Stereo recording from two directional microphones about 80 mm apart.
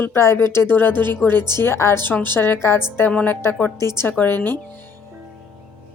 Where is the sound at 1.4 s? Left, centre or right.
Right.